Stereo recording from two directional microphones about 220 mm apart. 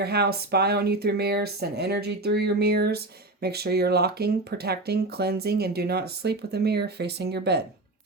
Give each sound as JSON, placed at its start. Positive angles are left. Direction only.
{"t": 0.0, "sound": "speech", "side_deg": -45}